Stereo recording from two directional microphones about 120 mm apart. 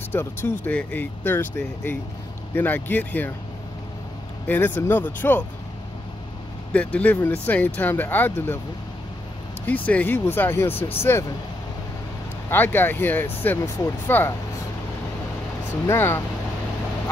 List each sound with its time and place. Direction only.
0.1 s speech: 20° left (ahead or behind)
4.5 s speech: 15° left (ahead or behind)
6.7 s speech: 10° left (ahead or behind)
9.8 s speech: 15° left (ahead or behind)
12.4 s speech: 15° left (ahead or behind)
15.9 s speech: 20° left (ahead or behind)